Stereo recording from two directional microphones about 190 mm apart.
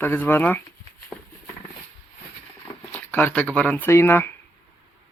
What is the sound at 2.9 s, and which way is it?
Speech, 10° left (ahead or behind).